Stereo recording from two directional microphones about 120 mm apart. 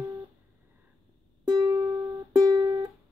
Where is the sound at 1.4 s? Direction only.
35° right (ahead or behind).